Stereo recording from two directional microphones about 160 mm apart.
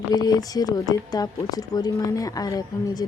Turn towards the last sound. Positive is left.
turn(degrees=25)  # may be behind; listen again after turning